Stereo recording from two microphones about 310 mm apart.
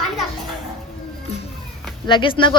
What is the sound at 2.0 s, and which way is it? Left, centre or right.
Speech, centre.